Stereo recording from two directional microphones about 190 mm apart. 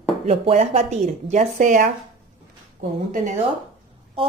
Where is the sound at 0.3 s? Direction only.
35° right (ahead or behind).